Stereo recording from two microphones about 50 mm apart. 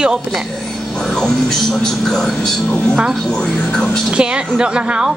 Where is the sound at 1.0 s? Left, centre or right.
Centre.